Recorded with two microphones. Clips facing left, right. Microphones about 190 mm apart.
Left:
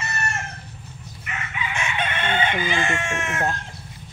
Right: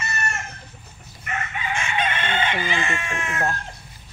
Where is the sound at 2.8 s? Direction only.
70° left (ahead or behind).